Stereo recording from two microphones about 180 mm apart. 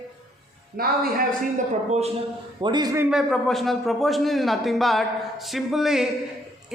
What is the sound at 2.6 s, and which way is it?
Speech, 25° right (ahead or behind).